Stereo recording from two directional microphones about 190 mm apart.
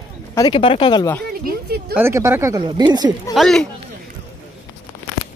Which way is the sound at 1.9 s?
15° right (ahead or behind).